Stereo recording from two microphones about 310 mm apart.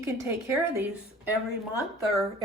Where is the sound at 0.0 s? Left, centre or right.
Centre.